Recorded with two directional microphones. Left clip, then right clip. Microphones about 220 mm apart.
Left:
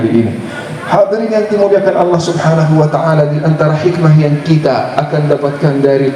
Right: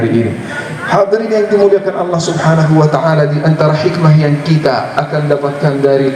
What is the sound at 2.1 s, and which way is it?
A man's voice, 15° right (ahead or behind).